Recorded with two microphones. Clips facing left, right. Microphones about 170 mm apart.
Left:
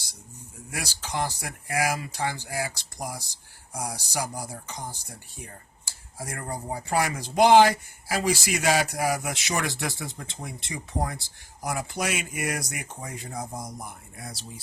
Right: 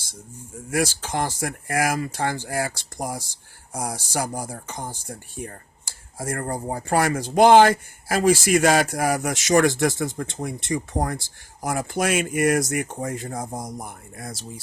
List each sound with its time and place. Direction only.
0.7 s speech: 50° right (ahead or behind)